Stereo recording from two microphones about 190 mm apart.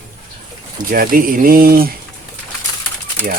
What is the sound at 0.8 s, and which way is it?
Speech, 45° right (ahead or behind).